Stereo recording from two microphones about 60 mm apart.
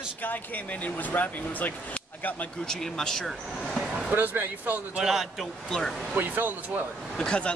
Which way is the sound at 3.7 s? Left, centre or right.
Centre.